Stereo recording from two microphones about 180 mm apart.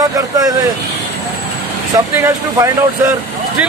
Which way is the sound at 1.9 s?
15° right (ahead or behind).